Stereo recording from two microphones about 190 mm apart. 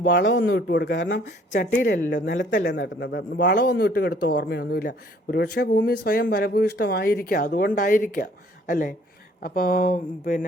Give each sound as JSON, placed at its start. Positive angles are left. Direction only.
{"t": 0.1, "sound": "speech", "side_deg": 65}
{"t": 1.2, "sound": "speech", "side_deg": 50}